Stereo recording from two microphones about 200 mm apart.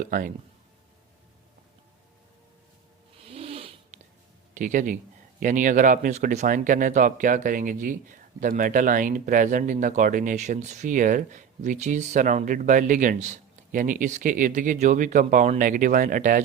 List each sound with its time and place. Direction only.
0.0 s speech: 45° right (ahead or behind)
3.2 s cat: 30° right (ahead or behind)
4.5 s speech: 40° right (ahead or behind)